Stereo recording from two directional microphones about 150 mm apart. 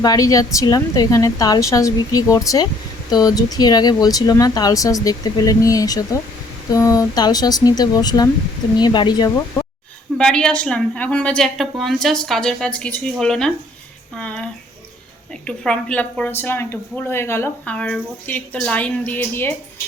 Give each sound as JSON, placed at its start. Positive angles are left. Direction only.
{"t": 0.0, "sound": "speech", "side_deg": 25}
{"t": 10.2, "sound": "a woman's voice", "side_deg": 5}
{"t": 15.4, "sound": "a woman's voice", "side_deg": 5}